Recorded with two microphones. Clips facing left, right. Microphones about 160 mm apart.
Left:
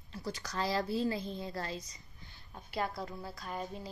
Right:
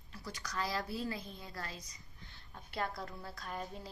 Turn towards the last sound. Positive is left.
turn(degrees=0)  # may be behind; listen again after turning